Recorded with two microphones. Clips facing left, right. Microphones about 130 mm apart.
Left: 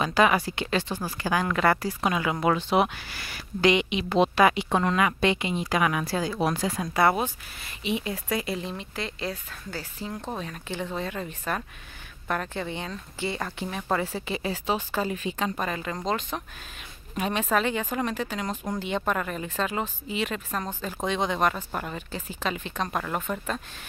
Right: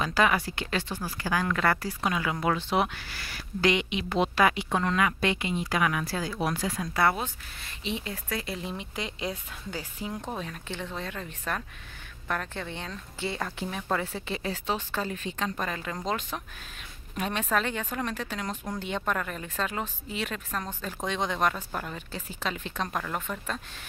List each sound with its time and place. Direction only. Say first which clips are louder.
0.0 s speech: left 3 dB; 20° left (ahead or behind)
8.5 s speech: left 4 dB; centre (ahead or behind)
8.7 s speech: left 1 dB; 15° right (ahead or behind)
10.3 s speech: left 2 dB; centre (ahead or behind)